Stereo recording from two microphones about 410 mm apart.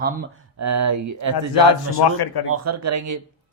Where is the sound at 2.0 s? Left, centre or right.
Left.